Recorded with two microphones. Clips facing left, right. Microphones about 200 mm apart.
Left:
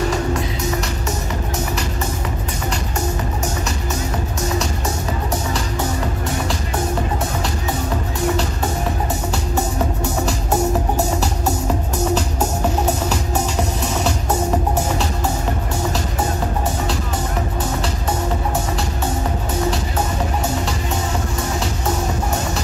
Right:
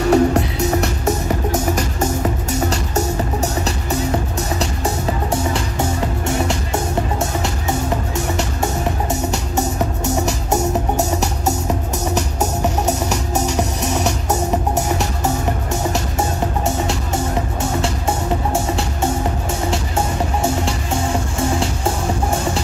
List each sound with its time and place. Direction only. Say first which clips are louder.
0.1 s music: right 7 dB; 60° right (ahead or behind)